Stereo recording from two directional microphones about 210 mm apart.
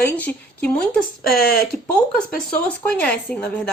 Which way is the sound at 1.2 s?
45° left (ahead or behind).